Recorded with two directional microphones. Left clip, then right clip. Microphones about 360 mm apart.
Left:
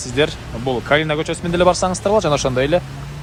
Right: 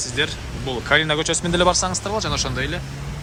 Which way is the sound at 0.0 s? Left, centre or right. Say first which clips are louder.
Left 5 dB; centre.